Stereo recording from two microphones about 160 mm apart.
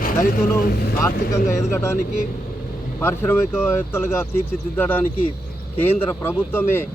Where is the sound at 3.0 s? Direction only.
15° left (ahead or behind).